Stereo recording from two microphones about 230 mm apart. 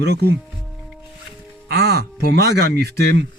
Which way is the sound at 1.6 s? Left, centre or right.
Right.